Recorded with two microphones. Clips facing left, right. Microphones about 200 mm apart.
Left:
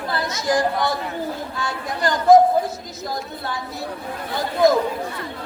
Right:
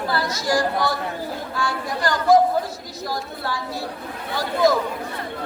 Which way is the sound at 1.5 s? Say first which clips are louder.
Right 2 dB; 20° left (ahead or behind).